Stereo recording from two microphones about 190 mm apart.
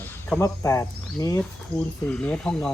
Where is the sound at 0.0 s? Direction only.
10° left (ahead or behind).